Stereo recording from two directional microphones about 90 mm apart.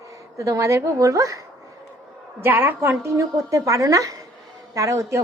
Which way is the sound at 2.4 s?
20° right (ahead or behind).